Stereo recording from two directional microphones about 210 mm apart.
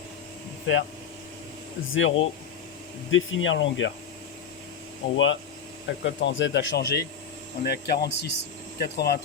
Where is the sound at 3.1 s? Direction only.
65° left (ahead or behind).